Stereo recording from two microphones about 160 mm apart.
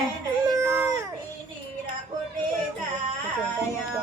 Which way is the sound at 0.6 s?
15° right (ahead or behind).